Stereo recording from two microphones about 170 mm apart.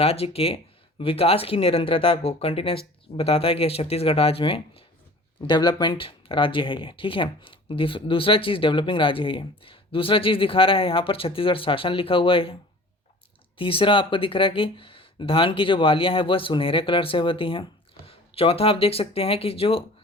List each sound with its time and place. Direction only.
0.0 s speech: 35° left (ahead or behind)
13.6 s speech: 30° left (ahead or behind)